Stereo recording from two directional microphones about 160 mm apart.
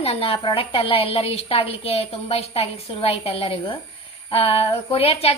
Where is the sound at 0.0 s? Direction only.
35° left (ahead or behind).